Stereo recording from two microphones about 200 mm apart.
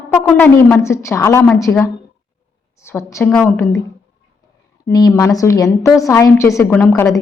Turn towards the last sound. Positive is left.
turn(degrees=15)  # may be behind; listen again after turning